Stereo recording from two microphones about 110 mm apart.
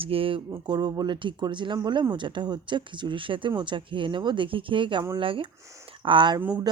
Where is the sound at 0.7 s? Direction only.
40° right (ahead or behind).